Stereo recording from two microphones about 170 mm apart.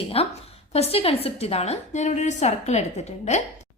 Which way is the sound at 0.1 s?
35° left (ahead or behind).